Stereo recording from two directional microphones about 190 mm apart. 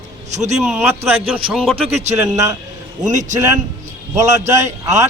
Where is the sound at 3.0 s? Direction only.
40° right (ahead or behind).